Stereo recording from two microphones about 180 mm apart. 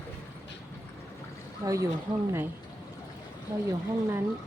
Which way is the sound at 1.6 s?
15° right (ahead or behind).